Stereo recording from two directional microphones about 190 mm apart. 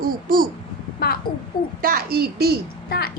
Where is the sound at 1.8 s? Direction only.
50° right (ahead or behind).